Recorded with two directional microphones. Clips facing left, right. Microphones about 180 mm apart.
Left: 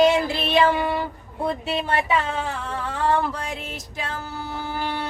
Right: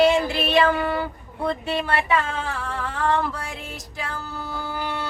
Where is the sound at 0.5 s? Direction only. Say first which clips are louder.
Left 1 dB; 20° left (ahead or behind).